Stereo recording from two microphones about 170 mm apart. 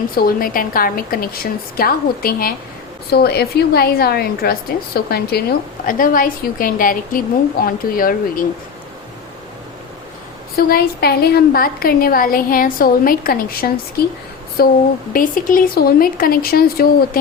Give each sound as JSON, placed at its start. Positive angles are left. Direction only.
{"t": 0.1, "sound": "a woman's voice", "side_deg": 60}
{"t": 10.6, "sound": "a woman's voice", "side_deg": 65}